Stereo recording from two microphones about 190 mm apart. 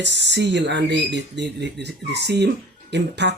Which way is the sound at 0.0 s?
65° right (ahead or behind).